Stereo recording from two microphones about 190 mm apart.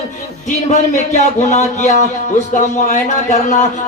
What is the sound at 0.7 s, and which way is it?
A man's voice, 40° left (ahead or behind).